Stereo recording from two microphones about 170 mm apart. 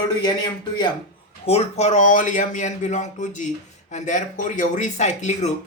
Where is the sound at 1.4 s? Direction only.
35° left (ahead or behind).